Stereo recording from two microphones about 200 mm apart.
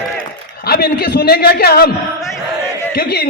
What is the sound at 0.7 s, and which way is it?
A man's voice, 50° left (ahead or behind).